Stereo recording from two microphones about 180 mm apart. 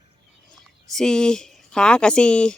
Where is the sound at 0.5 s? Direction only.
5° left (ahead or behind).